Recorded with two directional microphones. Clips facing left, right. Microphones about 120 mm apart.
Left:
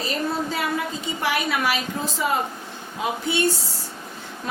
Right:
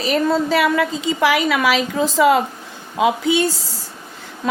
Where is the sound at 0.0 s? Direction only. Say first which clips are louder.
Right 8 dB; 85° right.